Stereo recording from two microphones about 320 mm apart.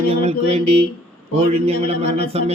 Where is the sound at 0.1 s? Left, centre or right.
Centre.